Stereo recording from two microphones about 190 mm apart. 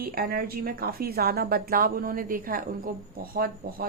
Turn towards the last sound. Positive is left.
turn(degrees=-50)  # may be behind; listen again after turning